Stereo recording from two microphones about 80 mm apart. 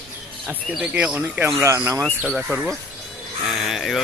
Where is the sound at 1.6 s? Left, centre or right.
Right.